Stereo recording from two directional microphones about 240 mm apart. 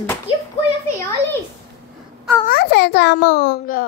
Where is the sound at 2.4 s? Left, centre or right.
Left.